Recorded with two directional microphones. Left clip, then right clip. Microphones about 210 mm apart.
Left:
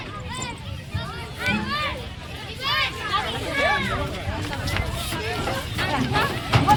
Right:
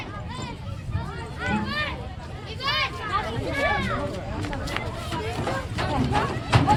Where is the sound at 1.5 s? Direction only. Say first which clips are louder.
Left 3 dB; 35° left (ahead or behind).